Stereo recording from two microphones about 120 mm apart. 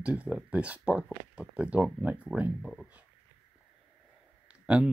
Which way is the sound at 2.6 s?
Centre (ahead or behind).